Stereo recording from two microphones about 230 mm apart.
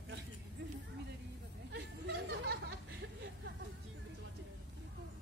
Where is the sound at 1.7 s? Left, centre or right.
Right.